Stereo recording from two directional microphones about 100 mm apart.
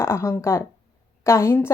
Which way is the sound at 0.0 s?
25° left (ahead or behind).